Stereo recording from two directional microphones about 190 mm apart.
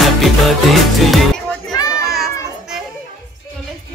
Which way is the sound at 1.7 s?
20° left (ahead or behind).